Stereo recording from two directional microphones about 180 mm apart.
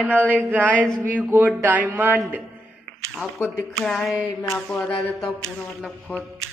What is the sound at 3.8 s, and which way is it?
Speech, 5° left (ahead or behind).